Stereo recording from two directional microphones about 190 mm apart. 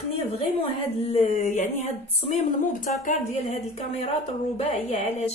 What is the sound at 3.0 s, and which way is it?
A woman's voice, 40° left (ahead or behind).